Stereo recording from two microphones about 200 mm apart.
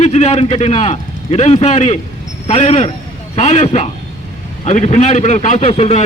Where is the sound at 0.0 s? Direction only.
35° left (ahead or behind).